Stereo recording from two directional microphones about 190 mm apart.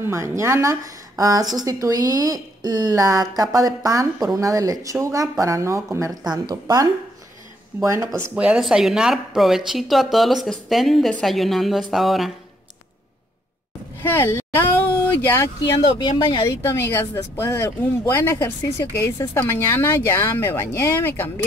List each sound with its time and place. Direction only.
0.0 s speech: 15° right (ahead or behind)
14.0 s speech: 10° left (ahead or behind)
16.0 s speech: 25° left (ahead or behind)
16.6 s speech: 10° left (ahead or behind)